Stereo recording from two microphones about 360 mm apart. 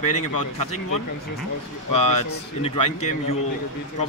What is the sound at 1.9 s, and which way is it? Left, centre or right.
Speech, left.